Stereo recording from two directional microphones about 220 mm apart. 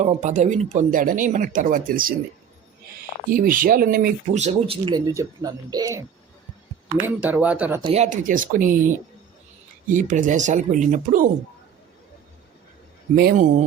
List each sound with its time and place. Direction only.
0.0 s speech: 35° right (ahead or behind)
3.2 s speech: 40° right (ahead or behind); by 6.0 s 15° right (ahead or behind)
7.0 s speech: 10° right (ahead or behind)
7.8 s speech: 30° right (ahead or behind)
9.9 s speech: 35° right (ahead or behind)
13.1 s speech: 40° right (ahead or behind)